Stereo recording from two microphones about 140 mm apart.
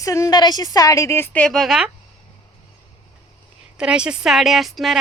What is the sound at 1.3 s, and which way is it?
Speech, 5° left (ahead or behind).